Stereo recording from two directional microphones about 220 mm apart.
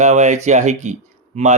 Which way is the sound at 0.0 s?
30° right (ahead or behind).